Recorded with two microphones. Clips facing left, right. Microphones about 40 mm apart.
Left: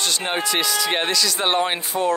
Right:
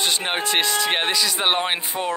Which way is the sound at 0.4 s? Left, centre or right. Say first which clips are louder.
Right 1 dB; right.